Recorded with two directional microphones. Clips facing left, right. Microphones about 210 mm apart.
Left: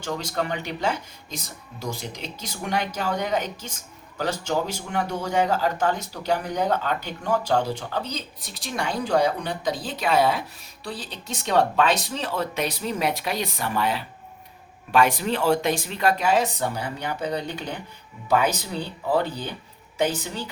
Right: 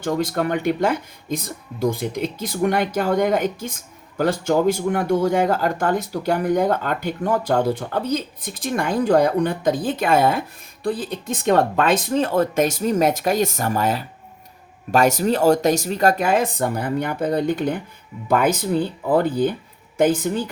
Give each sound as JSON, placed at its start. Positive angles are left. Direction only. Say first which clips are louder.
{"t": 0.0, "sound": "speech", "louder": "right 7 dB", "side_deg": -55}